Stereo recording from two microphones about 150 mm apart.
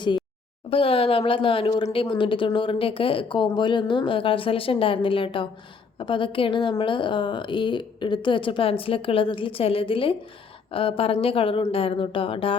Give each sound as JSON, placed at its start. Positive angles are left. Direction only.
{"t": 0.7, "sound": "speech", "side_deg": 40}